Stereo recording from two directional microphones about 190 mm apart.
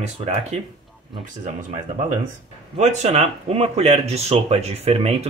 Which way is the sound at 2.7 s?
35° right (ahead or behind).